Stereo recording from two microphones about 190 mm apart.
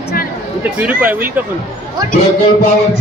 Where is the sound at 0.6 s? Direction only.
10° right (ahead or behind).